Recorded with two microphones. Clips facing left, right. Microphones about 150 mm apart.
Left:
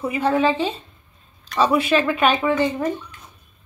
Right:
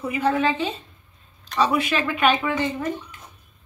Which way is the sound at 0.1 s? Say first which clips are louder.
Left 2 dB; 30° left (ahead or behind).